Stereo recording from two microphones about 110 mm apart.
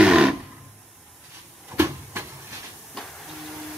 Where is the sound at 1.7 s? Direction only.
20° right (ahead or behind).